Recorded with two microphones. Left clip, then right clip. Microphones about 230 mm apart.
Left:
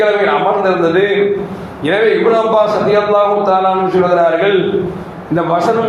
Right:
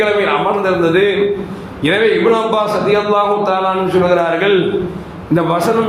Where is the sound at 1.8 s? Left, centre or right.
Right.